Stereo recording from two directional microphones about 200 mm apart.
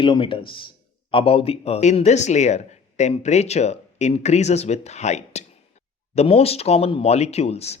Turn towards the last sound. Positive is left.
turn(degrees=30)  # may be behind; listen again after turning